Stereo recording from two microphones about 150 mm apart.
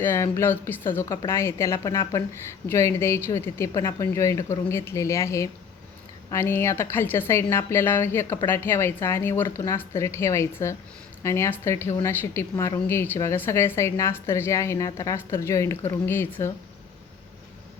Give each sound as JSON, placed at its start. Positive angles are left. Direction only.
{"t": 0.0, "sound": "a woman's voice", "side_deg": 15}